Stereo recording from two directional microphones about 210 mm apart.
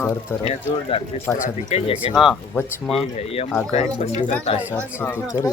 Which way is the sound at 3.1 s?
30° left (ahead or behind).